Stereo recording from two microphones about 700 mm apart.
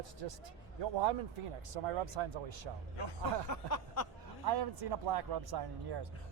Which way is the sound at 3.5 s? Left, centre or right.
Left.